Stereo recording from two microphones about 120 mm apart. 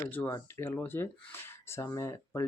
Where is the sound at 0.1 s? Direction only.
15° left (ahead or behind).